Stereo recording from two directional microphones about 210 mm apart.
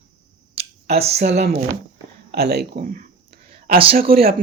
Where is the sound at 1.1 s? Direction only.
50° right (ahead or behind).